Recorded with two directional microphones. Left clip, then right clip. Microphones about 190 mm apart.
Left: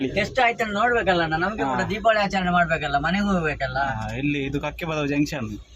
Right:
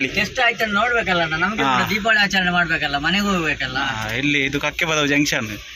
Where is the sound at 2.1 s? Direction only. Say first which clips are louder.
Right 4 dB; 50° left (ahead or behind).